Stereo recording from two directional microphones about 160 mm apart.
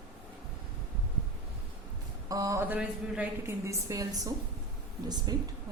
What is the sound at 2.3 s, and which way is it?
A woman's voice, 20° right (ahead or behind).